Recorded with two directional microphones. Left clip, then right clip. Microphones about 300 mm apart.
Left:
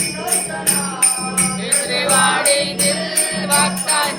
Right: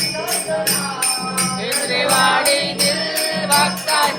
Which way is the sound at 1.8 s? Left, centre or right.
Centre.